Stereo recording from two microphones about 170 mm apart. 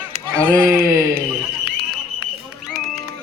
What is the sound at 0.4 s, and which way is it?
Speech, 15° right (ahead or behind).